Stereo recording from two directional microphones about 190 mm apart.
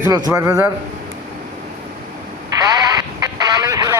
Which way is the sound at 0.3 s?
10° right (ahead or behind).